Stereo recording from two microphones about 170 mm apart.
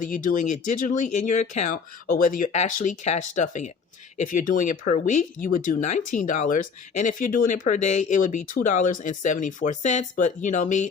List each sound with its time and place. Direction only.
0.0 s speech: 50° left (ahead or behind)